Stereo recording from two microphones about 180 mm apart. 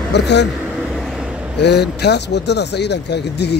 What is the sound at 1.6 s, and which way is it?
Speech, 70° left (ahead or behind).